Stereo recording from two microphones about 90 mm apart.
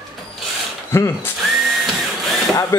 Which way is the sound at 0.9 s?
25° left (ahead or behind).